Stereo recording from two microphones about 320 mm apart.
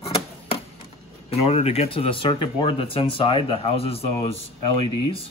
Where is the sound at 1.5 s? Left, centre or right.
Centre.